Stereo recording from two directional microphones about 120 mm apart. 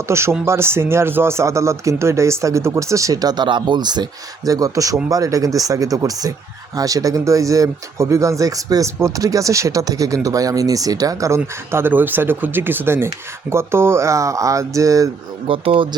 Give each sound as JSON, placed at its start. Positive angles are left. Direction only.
{"t": 0.1, "sound": "speech", "side_deg": -20}
{"t": 15.4, "sound": "speech", "side_deg": -50}